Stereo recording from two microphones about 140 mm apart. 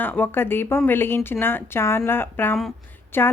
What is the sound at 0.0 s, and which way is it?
Speech, 15° left (ahead or behind).